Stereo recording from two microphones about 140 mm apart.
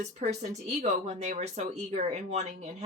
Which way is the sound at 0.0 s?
55° right (ahead or behind).